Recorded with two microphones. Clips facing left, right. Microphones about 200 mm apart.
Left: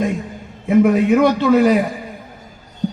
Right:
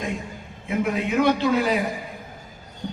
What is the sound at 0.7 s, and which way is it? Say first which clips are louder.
A man's voice: left 11 dB; 50° left (ahead or behind).